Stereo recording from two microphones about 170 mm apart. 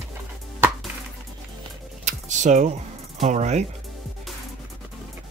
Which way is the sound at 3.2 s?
40° right (ahead or behind).